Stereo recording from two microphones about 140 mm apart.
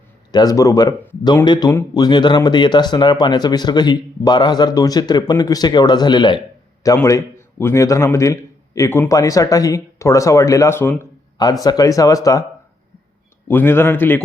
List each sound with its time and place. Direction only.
0.3 s a man's voice: 30° left (ahead or behind)
11.6 s a man's voice: 25° left (ahead or behind)
13.5 s a man's voice: 15° left (ahead or behind)